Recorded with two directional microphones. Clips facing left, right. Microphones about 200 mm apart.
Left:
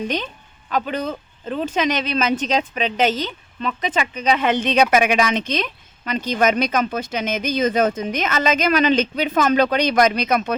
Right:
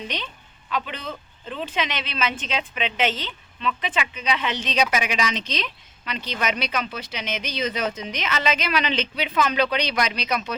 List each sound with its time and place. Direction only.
0.7 s speech: 45° left (ahead or behind)